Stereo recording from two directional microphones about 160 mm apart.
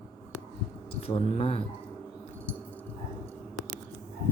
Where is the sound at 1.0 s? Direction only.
35° left (ahead or behind).